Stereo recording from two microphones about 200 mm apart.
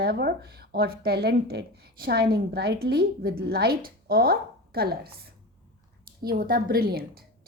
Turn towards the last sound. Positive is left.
turn(degrees=-50)  # may be behind; listen again after turning